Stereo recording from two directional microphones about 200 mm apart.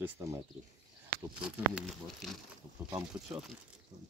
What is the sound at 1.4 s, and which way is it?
Speech, centre (ahead or behind).